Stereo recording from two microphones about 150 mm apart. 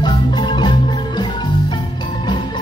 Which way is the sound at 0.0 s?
30° left (ahead or behind).